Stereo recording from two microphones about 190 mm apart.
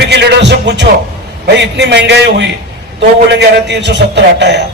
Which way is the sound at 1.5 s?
65° right (ahead or behind).